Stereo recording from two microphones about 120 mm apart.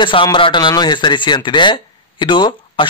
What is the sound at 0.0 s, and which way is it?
A man's voice, 40° left (ahead or behind).